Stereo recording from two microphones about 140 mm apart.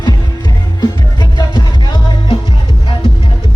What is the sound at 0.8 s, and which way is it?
Music, 30° left (ahead or behind).